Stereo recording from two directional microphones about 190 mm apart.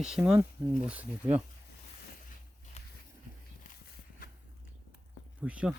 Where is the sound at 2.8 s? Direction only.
35° left (ahead or behind).